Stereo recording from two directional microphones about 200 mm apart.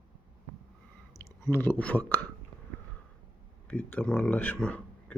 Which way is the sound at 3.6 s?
5° left (ahead or behind).